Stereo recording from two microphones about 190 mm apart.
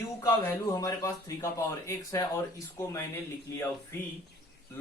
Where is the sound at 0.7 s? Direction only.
15° left (ahead or behind).